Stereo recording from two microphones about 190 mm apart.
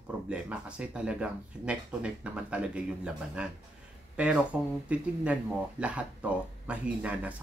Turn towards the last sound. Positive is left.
turn(degrees=-5)  # may be behind; listen again after turning